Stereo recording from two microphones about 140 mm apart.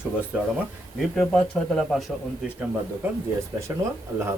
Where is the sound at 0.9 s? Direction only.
Centre (ahead or behind).